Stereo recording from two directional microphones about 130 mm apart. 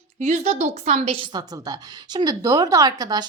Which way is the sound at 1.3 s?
30° right (ahead or behind).